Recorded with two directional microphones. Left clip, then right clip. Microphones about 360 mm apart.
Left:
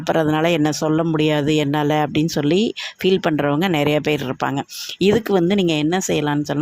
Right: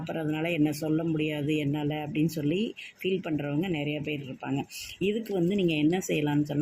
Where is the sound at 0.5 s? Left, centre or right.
Left.